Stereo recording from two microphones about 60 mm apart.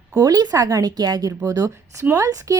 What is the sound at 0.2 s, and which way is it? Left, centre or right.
A woman's voice, right.